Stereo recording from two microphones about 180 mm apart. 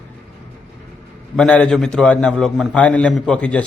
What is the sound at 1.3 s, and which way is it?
A man's voice, 5° left (ahead or behind).